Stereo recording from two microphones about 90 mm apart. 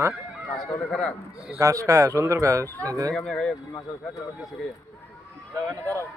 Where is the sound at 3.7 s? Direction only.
35° left (ahead or behind).